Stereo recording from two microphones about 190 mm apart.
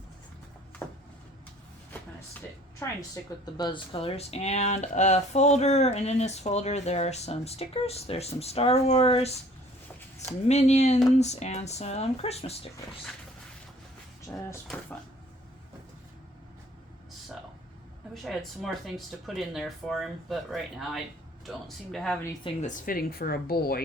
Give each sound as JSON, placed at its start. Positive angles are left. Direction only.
{"t": 0.8, "sound": "a sound", "side_deg": 10}
{"t": 3.4, "sound": "speech", "side_deg": 25}
{"t": 10.5, "sound": "speech", "side_deg": 35}
{"t": 14.3, "sound": "speech", "side_deg": 15}
{"t": 18.1, "sound": "speech", "side_deg": 0}
{"t": 22.6, "sound": "speech", "side_deg": 45}